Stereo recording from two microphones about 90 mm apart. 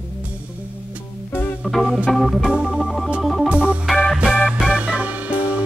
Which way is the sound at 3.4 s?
15° right (ahead or behind).